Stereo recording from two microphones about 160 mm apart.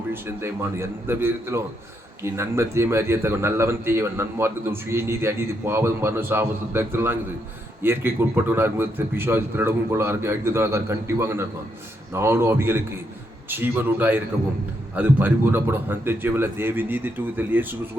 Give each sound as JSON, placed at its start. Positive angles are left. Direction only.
{"t": 0.1, "sound": "a man's voice", "side_deg": -15}